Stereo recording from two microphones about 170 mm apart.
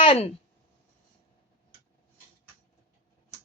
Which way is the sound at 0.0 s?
35° left (ahead or behind).